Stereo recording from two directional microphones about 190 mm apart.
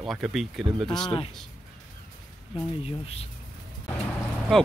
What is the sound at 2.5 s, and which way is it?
Speech, 30° left (ahead or behind).